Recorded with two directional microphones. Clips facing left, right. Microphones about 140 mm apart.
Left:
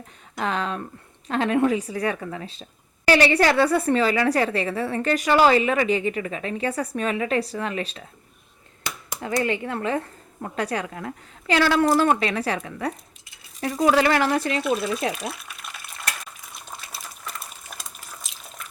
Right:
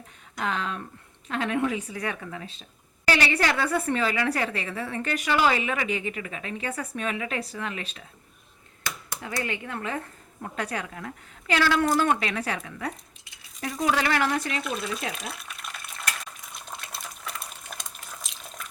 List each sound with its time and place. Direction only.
0.3 s a woman's voice: 35° left (ahead or behind)
9.4 s a woman's voice: 35° left (ahead or behind)
14.6 s speech: centre (ahead or behind)
15.3 s stir: centre (ahead or behind)